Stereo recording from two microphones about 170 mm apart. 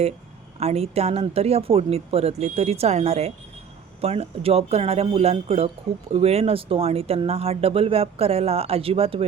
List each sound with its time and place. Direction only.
0.6 s speech: 40° right (ahead or behind)